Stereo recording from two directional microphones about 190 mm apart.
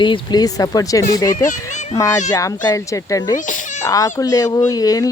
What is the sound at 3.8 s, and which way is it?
Speech, 20° left (ahead or behind).